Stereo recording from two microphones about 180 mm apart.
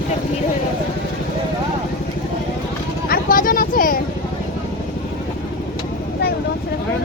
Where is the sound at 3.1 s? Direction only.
50° left (ahead or behind).